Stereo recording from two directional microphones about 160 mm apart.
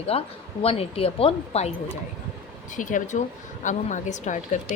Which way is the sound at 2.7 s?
55° left (ahead or behind).